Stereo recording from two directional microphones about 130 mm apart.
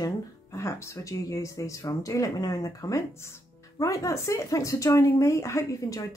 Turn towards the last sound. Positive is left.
turn(degrees=20)  # may be behind; listen again after turning